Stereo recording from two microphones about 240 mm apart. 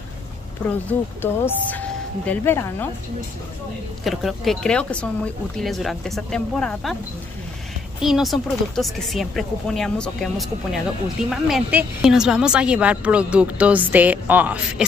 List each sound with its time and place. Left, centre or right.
0.8 s speech: centre
4.0 s a woman's voice: centre
8.0 s a woman's voice: centre